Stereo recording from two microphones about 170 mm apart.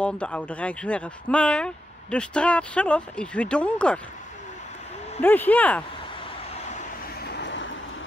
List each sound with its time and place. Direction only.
0.0 s speech: 5° left (ahead or behind)
5.2 s speech: 10° left (ahead or behind)
7.2 s vehicle: 85° left